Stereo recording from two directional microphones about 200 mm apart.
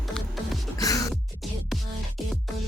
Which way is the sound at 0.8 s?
15° left (ahead or behind).